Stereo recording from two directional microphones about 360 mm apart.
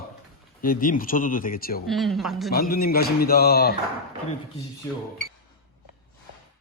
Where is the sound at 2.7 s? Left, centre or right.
Left.